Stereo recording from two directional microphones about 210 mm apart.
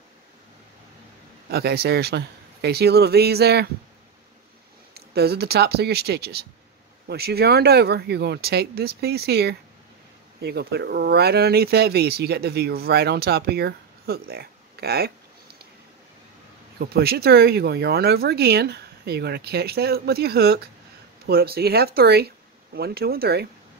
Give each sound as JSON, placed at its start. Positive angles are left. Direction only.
{"t": 1.5, "sound": "speech", "side_deg": -50}
{"t": 4.9, "sound": "speech", "side_deg": -50}
{"t": 16.9, "sound": "speech", "side_deg": -50}